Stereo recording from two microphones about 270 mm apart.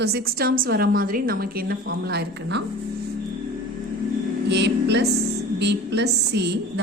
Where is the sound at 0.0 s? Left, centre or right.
Right.